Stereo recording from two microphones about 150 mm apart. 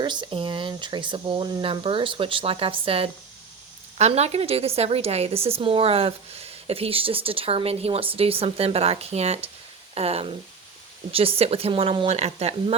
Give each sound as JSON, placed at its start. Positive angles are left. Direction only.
{"t": 0.0, "sound": "a woman's voice", "side_deg": -30}